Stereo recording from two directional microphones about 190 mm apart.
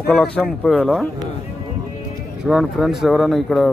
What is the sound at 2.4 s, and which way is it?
A man's voice, centre (ahead or behind).